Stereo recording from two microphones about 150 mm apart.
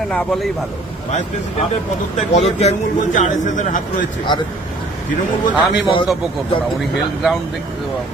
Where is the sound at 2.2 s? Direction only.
50° left (ahead or behind).